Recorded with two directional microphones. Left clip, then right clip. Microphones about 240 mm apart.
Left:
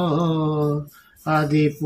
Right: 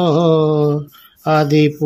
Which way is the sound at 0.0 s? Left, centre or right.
Right.